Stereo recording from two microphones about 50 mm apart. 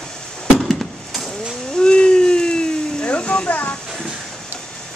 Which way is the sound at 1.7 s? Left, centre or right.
Left.